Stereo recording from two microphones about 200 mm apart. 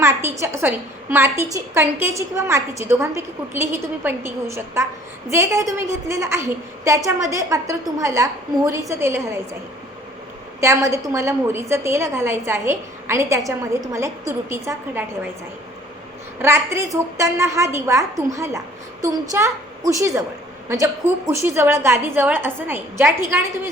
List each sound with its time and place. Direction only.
0.0 s a sound: 10° right (ahead or behind)
1.1 s a woman's voice: 10° right (ahead or behind)
10.6 s a woman's voice: 15° right (ahead or behind)
16.4 s a woman's voice: 10° right (ahead or behind)